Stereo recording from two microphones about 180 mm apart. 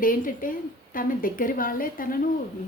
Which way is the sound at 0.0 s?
50° left (ahead or behind).